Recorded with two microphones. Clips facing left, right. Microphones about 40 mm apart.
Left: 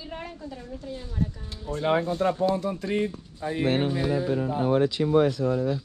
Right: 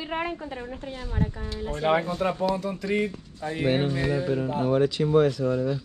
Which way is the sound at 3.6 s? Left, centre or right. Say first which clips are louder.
Even; centre.